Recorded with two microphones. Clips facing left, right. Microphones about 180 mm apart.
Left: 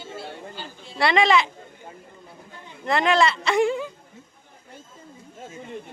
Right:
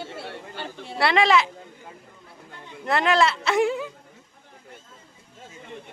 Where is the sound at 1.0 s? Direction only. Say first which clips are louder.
Even; 5° right (ahead or behind).